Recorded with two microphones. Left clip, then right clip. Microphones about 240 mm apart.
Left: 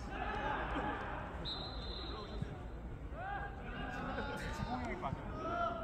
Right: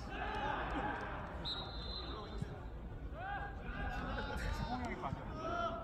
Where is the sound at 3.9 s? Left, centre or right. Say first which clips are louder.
Left 1 dB; right.